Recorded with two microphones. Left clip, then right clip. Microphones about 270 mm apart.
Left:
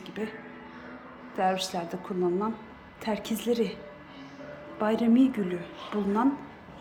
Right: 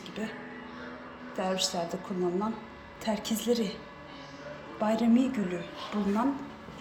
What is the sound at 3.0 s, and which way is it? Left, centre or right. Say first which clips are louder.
Speech: even; centre.